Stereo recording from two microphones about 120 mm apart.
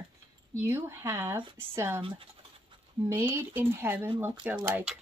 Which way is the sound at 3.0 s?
20° right (ahead or behind).